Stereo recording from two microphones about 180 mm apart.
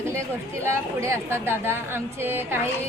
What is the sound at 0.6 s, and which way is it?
A woman's voice, 15° right (ahead or behind).